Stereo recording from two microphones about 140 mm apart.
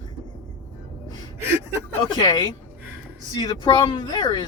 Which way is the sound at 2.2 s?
30° left (ahead or behind).